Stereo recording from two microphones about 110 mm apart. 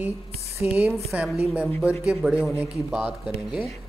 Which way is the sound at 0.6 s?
15° right (ahead or behind).